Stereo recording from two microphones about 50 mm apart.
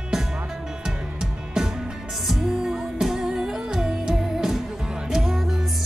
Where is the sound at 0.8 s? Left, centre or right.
Centre.